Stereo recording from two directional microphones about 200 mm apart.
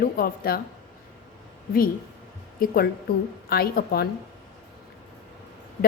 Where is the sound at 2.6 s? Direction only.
50° left (ahead or behind).